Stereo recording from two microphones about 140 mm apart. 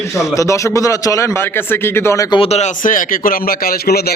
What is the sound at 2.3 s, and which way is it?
Speech, 40° left (ahead or behind).